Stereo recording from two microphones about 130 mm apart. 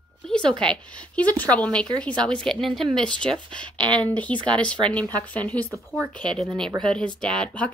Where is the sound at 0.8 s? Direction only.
10° left (ahead or behind).